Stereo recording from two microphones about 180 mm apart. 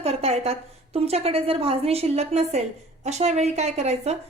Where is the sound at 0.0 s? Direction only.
35° right (ahead or behind).